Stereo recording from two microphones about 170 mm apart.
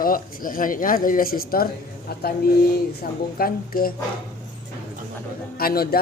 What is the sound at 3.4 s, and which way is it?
Speech, 60° left (ahead or behind).